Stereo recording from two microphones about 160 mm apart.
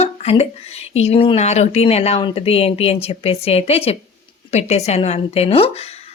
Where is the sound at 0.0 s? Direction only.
40° left (ahead or behind).